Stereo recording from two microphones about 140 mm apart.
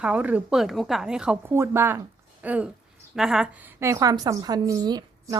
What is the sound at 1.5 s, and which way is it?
A woman's voice, 15° right (ahead or behind).